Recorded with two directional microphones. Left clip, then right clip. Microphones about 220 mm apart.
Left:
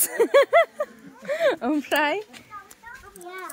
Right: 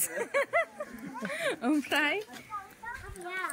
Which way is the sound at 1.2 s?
15° left (ahead or behind).